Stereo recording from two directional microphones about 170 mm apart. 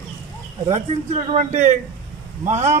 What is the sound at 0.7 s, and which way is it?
A man's voice, 40° right (ahead or behind).